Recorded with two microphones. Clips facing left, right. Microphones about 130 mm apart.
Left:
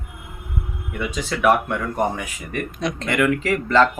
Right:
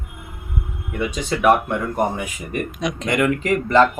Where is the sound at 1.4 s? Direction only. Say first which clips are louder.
Right 1 dB; 15° right (ahead or behind).